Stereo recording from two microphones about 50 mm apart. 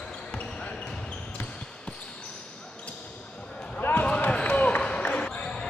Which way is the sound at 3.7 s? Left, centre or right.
Left.